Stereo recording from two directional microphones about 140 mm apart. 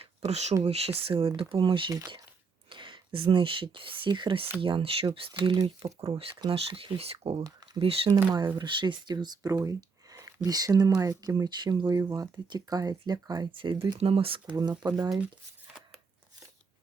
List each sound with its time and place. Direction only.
0.3 s speech: 50° right (ahead or behind); by 6.1 s 25° right (ahead or behind)
6.4 s speech: 40° right (ahead or behind)
14.5 s speech: 25° right (ahead or behind)
15.1 s speech: 10° right (ahead or behind)